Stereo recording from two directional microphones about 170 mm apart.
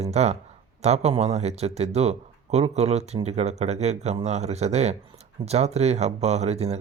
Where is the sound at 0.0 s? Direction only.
40° right (ahead or behind).